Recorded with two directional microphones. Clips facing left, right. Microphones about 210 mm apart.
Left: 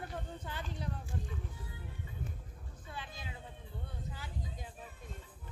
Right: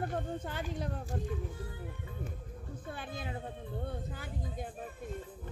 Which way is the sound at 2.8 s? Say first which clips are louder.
Right 5 dB; 55° right (ahead or behind).